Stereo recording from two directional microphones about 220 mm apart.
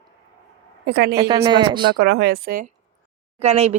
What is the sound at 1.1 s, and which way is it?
Speech, 15° right (ahead or behind).